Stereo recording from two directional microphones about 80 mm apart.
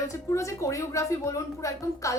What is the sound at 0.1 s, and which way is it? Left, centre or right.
A woman's voice, left.